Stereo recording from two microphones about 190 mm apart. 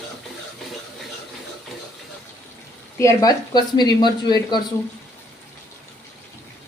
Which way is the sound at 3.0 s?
20° left (ahead or behind).